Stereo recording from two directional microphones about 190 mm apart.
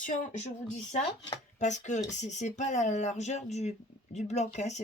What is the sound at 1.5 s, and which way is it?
Speech, 40° left (ahead or behind).